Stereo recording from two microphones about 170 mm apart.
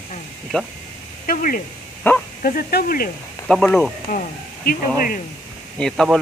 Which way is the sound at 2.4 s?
60° left (ahead or behind).